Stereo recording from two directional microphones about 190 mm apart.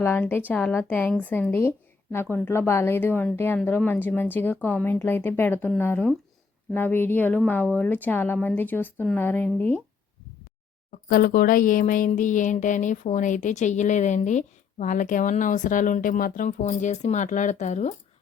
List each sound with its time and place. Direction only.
0.0 s a woman's voice: 10° left (ahead or behind)
11.1 s speech: 50° left (ahead or behind)